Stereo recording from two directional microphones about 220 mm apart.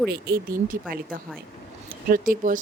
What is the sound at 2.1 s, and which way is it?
Speech, 40° right (ahead or behind).